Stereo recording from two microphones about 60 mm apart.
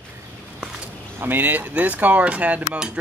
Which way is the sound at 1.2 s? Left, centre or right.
Right.